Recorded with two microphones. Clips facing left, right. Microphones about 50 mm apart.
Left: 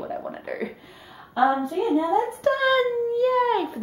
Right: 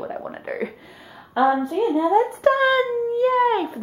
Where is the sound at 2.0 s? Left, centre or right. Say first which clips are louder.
Right 4 dB; right.